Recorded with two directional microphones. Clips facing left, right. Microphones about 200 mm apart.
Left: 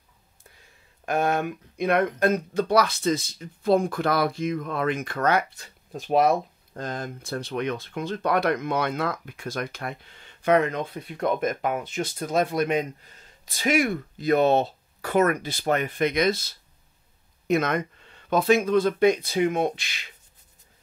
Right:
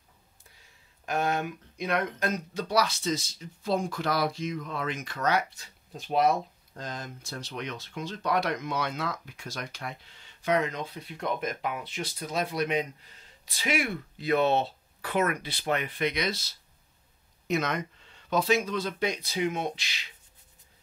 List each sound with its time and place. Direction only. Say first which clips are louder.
1.0 s speech: left 5 dB; 55° left (ahead or behind)